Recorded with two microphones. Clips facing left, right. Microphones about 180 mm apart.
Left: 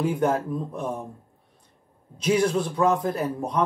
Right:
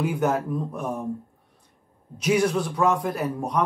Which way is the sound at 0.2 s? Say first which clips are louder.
Even; 25° left (ahead or behind).